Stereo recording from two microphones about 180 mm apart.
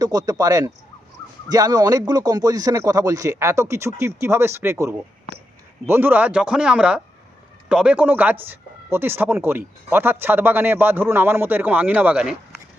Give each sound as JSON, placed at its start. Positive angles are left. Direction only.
{"t": 0.0, "sound": "speech", "side_deg": -20}